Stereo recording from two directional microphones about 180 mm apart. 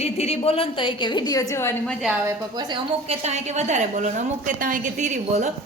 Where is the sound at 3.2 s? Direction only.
40° right (ahead or behind).